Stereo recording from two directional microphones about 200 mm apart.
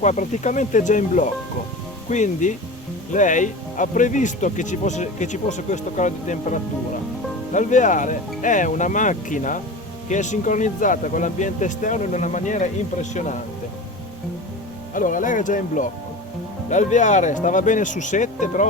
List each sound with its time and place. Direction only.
0.0 s speech: 35° left (ahead or behind)
14.9 s speech: 40° left (ahead or behind)